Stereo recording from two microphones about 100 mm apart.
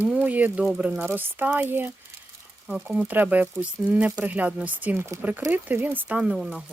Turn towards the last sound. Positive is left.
turn(degrees=-5)  # may be behind; listen again after turning